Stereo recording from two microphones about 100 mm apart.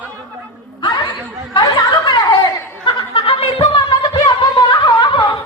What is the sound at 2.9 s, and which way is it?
Chuckle, 60° left (ahead or behind).